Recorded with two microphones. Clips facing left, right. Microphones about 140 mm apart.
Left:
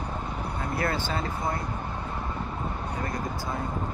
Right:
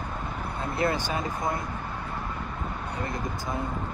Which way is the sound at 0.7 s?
20° right (ahead or behind).